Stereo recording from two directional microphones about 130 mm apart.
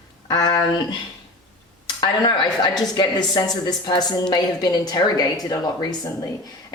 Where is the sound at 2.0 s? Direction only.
35° left (ahead or behind).